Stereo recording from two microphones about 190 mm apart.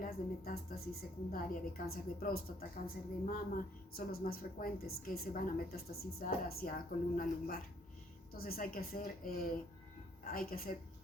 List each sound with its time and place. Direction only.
0.0 s a woman's voice: 50° left (ahead or behind)